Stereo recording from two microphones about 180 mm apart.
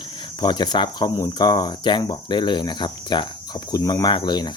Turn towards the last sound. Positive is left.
turn(degrees=25)  # may be behind; listen again after turning